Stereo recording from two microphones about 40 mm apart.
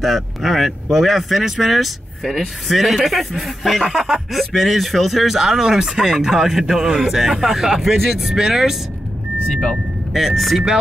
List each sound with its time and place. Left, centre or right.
0.0 s speech: centre
9.5 s speech: left
10.1 s speech: centre